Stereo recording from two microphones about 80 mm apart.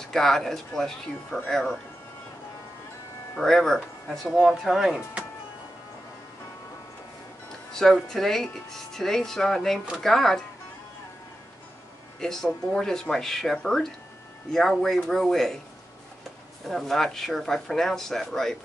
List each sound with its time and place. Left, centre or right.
0.0 s speech: centre
3.3 s speech: centre
7.7 s speech: centre
12.2 s speech: centre
16.6 s speech: centre